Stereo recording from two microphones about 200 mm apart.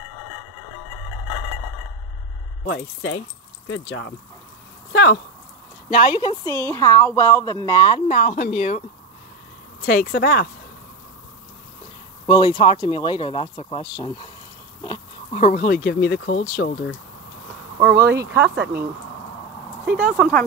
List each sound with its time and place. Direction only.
2.7 s speech: 65° left (ahead or behind)
3.6 s speech: 80° left
4.9 s speech: 55° left (ahead or behind)
5.9 s speech: 30° left (ahead or behind)
9.8 s speech: 50° left (ahead or behind)
12.3 s speech: 25° left (ahead or behind)
15.3 s speech: 40° left (ahead or behind); by 16.9 s 55° left (ahead or behind)
17.8 s speech: 10° right (ahead or behind)
19.9 s speech: 5° right (ahead or behind)